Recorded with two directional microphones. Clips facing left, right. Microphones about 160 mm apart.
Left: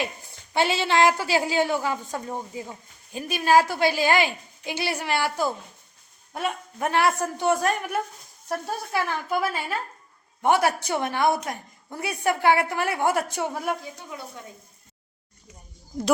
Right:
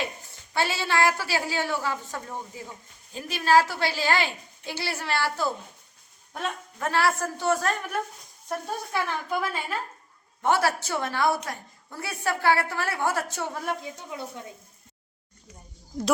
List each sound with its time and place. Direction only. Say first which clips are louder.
0.5 s a woman's voice: left 4 dB; 20° left (ahead or behind)
10.4 s a woman's voice: left 3 dB; 15° left (ahead or behind)